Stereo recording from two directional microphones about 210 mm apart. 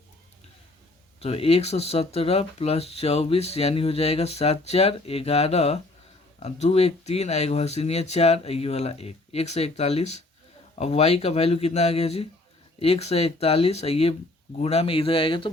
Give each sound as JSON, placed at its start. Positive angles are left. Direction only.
{"t": 1.2, "sound": "speech", "side_deg": 30}